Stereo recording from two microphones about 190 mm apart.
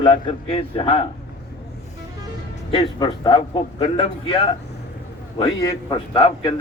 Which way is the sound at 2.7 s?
25° left (ahead or behind).